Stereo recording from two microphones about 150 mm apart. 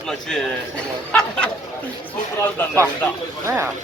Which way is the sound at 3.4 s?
15° right (ahead or behind).